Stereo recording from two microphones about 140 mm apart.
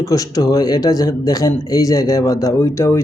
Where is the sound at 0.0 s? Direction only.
25° left (ahead or behind).